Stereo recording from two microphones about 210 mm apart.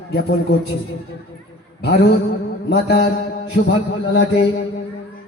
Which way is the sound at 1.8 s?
50° left (ahead or behind).